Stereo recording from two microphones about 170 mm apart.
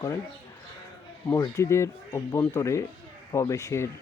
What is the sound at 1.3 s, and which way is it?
Speech, 20° left (ahead or behind).